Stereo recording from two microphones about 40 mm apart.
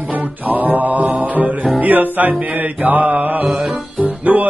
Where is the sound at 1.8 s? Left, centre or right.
Right.